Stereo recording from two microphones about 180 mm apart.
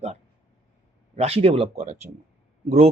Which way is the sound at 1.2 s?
35° right (ahead or behind).